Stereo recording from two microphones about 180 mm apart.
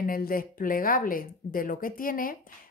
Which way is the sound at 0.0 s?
50° left (ahead or behind).